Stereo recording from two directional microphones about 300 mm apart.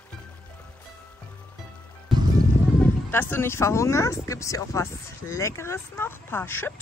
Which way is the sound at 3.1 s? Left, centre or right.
Centre.